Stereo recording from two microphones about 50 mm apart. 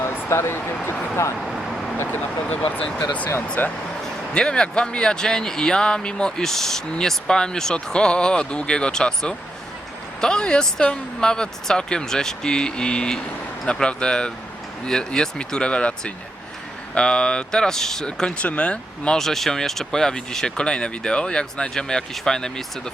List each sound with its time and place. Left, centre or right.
0.0 s speech: left
1.4 s vehicle: centre
2.1 s speech: left
4.4 s speech: centre
19.1 s speech: centre